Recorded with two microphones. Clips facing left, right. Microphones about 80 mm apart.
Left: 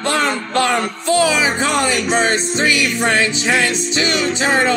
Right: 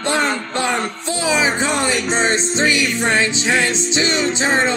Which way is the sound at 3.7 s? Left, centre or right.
Right.